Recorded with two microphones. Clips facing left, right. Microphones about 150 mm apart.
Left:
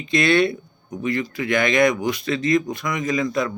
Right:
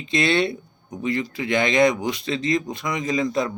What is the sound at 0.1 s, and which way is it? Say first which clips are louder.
Speech: left 3 dB; 25° right (ahead or behind).